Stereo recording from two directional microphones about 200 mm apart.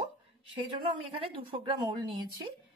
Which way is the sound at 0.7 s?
25° right (ahead or behind).